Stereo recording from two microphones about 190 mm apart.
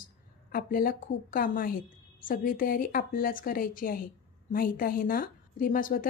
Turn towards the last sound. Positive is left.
turn(degrees=45)  # may be behind; listen again after turning